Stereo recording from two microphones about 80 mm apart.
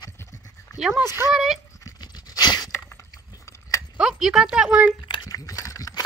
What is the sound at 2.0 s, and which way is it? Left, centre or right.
Pant, left.